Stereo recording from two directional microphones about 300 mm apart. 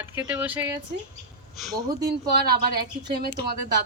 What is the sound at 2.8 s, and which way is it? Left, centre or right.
Speech, right.